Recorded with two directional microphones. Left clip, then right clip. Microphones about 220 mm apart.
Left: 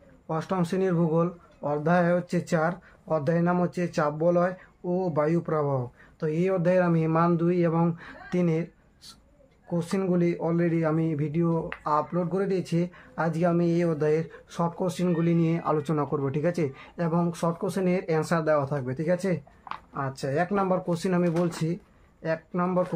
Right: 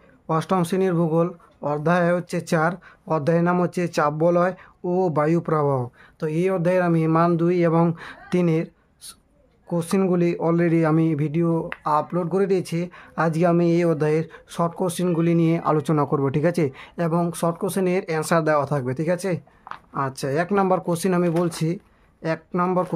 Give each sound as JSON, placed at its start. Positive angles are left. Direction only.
{"t": 0.3, "sound": "speech", "side_deg": -50}